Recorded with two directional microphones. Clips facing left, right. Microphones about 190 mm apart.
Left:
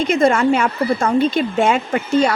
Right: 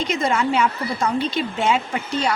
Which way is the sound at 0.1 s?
55° left (ahead or behind).